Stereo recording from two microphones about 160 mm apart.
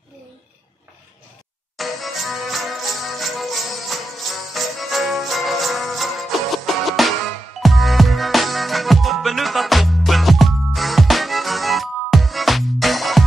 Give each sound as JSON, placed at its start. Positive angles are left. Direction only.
{"t": 1.8, "sound": "music", "side_deg": 0}